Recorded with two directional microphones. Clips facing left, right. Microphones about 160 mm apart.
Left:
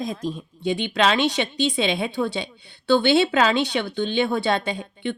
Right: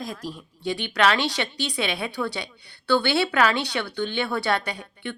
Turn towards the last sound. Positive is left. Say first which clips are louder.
# left 6 dB
turn(degrees=20)  # may be behind; listen again after turning